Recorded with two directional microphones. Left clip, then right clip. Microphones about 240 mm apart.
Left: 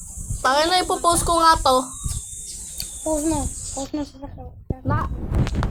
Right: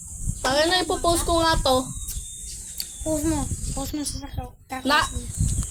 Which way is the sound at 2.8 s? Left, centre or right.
Right.